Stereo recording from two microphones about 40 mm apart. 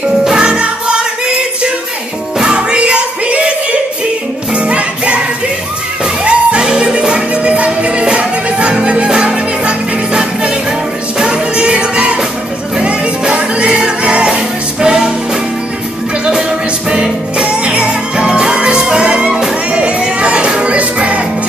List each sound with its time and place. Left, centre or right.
0.4 s music: right
6.2 s music: right
16.3 s music: right